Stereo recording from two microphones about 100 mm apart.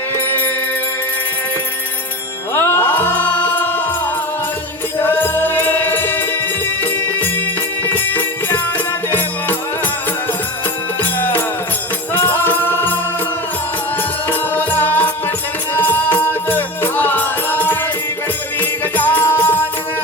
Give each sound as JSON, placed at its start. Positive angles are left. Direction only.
{"t": 2.6, "sound": "music", "side_deg": 25}
{"t": 5.0, "sound": "music", "side_deg": 20}
{"t": 7.9, "sound": "music", "side_deg": 20}
{"t": 11.2, "sound": "music", "side_deg": 20}
{"t": 14.3, "sound": "music", "side_deg": 20}